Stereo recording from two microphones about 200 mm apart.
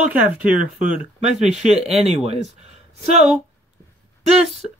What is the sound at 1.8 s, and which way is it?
Speech, 30° right (ahead or behind).